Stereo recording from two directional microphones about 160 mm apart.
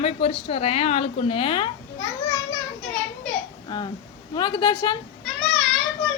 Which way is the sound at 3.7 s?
30° left (ahead or behind).